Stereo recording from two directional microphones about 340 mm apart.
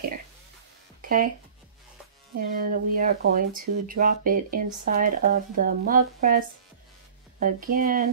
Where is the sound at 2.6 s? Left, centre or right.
Right.